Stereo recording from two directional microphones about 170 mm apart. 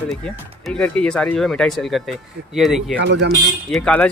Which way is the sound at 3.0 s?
90° right.